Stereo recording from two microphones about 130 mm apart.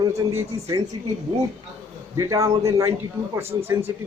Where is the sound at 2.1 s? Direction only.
25° right (ahead or behind).